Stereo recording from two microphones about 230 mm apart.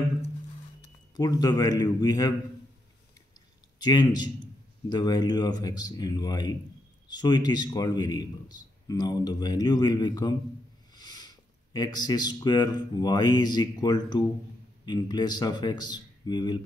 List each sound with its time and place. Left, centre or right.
1.1 s a man's voice: centre
3.8 s a man's voice: centre